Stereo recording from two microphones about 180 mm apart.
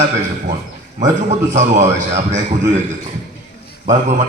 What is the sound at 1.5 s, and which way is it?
Speech, 40° right (ahead or behind).